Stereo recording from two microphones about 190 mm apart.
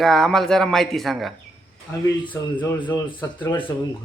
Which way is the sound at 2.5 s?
25° left (ahead or behind).